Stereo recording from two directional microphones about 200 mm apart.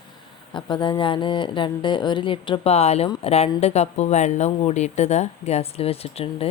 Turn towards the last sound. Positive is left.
turn(degrees=30)  # may be behind; listen again after turning